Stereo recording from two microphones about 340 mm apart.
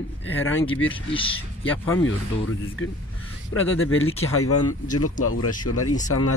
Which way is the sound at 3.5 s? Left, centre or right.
Left.